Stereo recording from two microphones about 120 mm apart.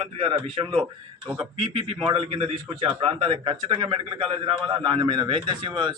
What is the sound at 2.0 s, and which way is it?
A man's voice, 55° right (ahead or behind).